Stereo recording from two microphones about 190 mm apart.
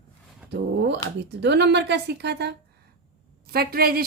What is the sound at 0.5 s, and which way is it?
A woman's voice, 65° right (ahead or behind).